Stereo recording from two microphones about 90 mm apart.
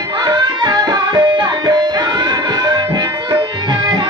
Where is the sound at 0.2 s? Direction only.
50° right (ahead or behind).